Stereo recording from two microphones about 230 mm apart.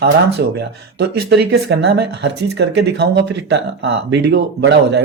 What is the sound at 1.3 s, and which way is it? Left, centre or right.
Speech, right.